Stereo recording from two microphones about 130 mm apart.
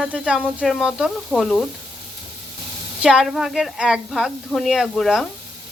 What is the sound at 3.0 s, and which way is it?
Speech, 5° right (ahead or behind).